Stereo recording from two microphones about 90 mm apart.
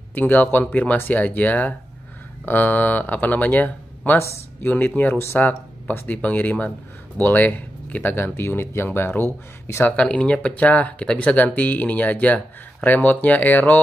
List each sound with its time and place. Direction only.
0.1 s speech: 20° left (ahead or behind)
9.9 s speech: 10° left (ahead or behind)